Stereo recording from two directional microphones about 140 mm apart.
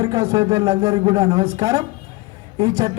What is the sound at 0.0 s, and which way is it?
A man's voice, 25° right (ahead or behind).